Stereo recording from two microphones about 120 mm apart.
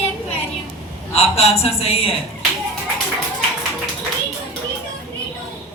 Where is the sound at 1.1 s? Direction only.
60° left (ahead or behind).